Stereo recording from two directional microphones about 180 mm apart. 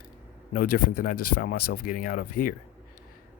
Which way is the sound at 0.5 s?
55° left (ahead or behind).